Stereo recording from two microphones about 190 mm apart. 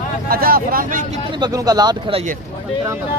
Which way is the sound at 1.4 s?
20° right (ahead or behind).